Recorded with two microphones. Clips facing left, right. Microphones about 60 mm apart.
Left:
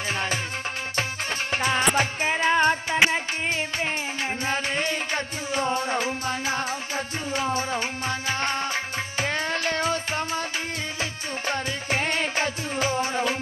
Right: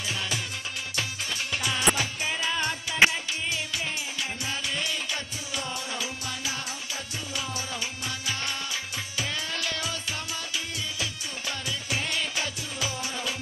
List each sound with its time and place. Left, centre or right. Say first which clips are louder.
0.1 s music: left 5 dB; left
1.5 s music: left 4 dB; left